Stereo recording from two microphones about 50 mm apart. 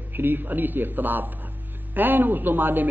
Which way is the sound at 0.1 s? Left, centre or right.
Right.